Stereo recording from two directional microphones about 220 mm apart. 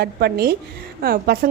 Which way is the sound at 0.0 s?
45° right (ahead or behind).